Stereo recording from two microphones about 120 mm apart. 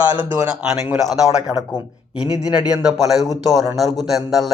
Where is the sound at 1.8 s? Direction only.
40° left (ahead or behind).